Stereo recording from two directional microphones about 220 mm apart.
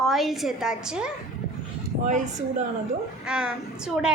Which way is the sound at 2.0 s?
35° right (ahead or behind).